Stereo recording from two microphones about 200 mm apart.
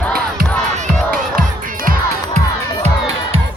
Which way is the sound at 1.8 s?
40° right (ahead or behind).